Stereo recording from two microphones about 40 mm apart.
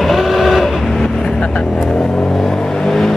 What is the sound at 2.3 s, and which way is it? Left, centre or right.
Vehicle, centre.